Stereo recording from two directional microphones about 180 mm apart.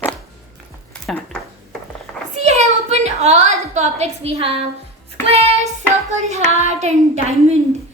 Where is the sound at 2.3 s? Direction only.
35° right (ahead or behind).